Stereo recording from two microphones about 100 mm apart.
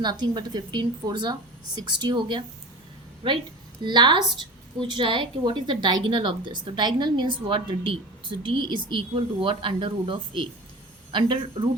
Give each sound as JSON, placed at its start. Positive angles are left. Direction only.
{"t": 0.0, "sound": "a woman's voice", "side_deg": -45}
{"t": 3.8, "sound": "a woman's voice", "side_deg": -50}